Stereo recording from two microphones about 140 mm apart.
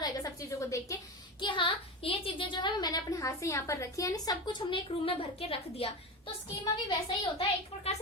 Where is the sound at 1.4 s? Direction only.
35° left (ahead or behind).